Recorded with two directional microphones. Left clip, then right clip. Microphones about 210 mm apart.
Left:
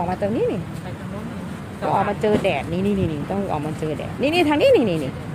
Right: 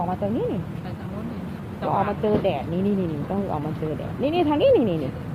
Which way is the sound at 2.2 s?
15° left (ahead or behind).